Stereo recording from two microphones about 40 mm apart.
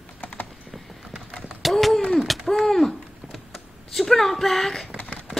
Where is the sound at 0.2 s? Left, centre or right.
Left.